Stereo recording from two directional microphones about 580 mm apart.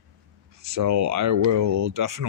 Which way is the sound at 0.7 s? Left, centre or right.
Right.